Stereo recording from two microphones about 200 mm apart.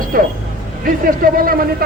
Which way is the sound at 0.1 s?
45° right (ahead or behind).